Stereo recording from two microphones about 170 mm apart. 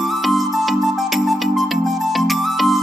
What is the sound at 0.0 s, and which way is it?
Music, centre (ahead or behind).